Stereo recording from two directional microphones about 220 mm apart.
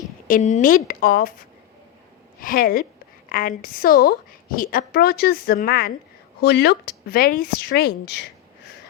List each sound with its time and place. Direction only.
0.3 s a woman's voice: 35° left (ahead or behind); by 8.7 s 50° left (ahead or behind)